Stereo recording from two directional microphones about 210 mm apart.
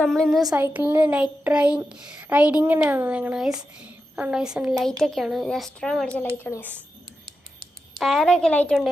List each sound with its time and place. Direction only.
0.0 s a woman's voice: centre (ahead or behind)
0.4 s a child's voice: 10° right (ahead or behind); by 6.7 s 10° left (ahead or behind)
7.9 s a woman's voice: centre (ahead or behind)